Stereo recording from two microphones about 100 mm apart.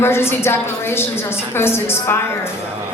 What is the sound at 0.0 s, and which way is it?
A woman's voice, 25° left (ahead or behind).